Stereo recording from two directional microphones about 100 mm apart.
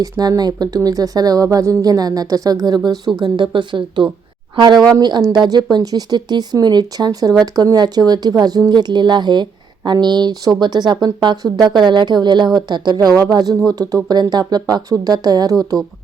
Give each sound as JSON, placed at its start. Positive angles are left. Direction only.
{"t": 0.0, "sound": "speech", "side_deg": -40}
{"t": 3.2, "sound": "a woman's voice", "side_deg": -50}